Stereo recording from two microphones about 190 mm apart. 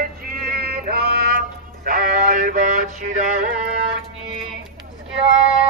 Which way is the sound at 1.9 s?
45° right (ahead or behind).